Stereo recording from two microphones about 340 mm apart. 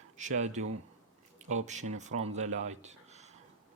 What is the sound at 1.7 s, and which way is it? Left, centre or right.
Speech, right.